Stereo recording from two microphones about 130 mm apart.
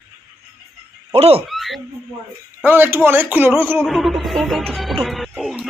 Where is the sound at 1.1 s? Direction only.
50° right (ahead or behind).